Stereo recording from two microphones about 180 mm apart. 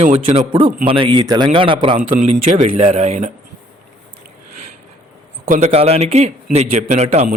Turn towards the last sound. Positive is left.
turn(degrees=-35)  # may be behind; listen again after turning